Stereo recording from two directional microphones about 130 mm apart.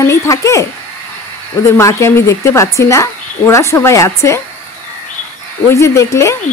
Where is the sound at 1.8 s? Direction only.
20° left (ahead or behind).